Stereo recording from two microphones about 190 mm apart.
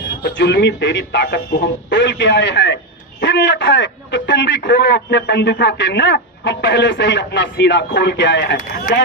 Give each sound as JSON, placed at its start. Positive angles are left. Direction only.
{"t": 0.2, "sound": "a man's voice", "side_deg": 65}